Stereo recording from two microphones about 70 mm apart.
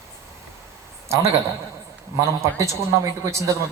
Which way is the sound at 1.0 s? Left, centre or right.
Right.